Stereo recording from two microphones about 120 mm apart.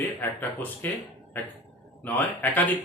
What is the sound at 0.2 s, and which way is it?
Speech, 15° left (ahead or behind).